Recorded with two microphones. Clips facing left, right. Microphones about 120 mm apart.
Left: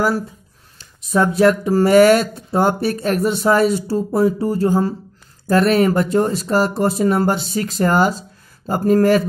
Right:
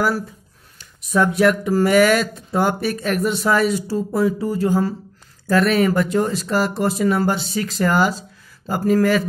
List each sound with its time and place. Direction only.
0.7 s speech: 30° left (ahead or behind)